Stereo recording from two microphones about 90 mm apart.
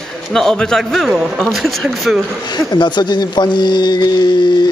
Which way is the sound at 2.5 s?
55° left (ahead or behind).